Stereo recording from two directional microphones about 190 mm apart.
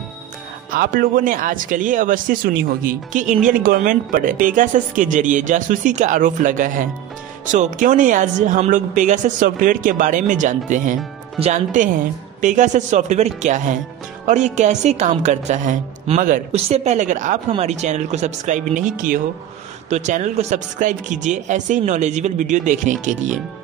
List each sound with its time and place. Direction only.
0.7 s speech: 50° right (ahead or behind)